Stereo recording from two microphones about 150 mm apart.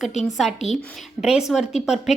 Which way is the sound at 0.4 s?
Centre (ahead or behind).